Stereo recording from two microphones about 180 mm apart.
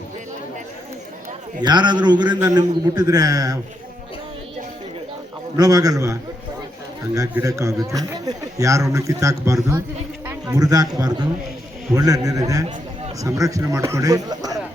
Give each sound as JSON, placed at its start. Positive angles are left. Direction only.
{"t": 1.6, "sound": "a man's voice", "side_deg": -25}
{"t": 5.5, "sound": "a man's voice", "side_deg": -20}